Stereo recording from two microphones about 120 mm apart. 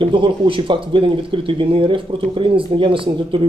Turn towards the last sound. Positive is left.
turn(degrees=-45)  # may be behind; listen again after turning